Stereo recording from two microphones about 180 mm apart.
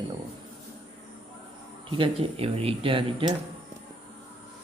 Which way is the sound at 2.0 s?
30° right (ahead or behind).